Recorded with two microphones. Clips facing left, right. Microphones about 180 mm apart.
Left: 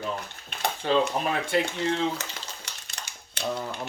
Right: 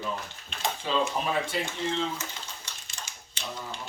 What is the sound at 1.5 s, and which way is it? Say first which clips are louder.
Speech: left 5 dB; 65° left (ahead or behind).